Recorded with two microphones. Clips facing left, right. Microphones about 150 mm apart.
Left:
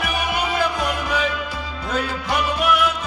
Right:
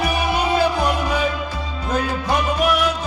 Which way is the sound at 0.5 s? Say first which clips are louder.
Right 4 dB; 35° right (ahead or behind).